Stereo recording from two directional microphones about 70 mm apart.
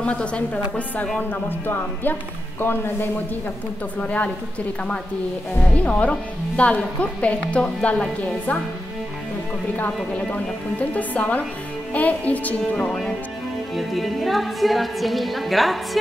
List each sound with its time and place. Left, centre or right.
0.0 s a woman's voice: centre
1.3 s music: left
2.6 s speech: left
4.0 s music: centre
5.9 s a woman's voice: centre
11.0 s music: left
13.7 s a woman's voice: centre